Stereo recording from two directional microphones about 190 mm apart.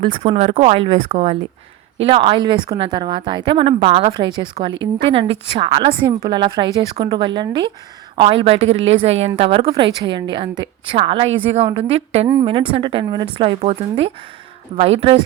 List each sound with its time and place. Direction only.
0.1 s a woman's voice: 35° right (ahead or behind)